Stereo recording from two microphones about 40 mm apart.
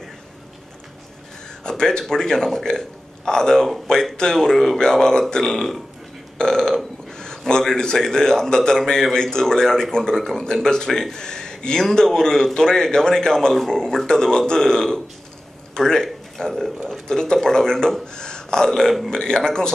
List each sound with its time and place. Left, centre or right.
1.6 s a man's voice: centre
6.3 s burping: centre
7.1 s a man's voice: centre